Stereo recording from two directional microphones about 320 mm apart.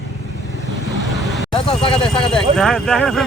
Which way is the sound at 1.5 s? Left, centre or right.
Centre.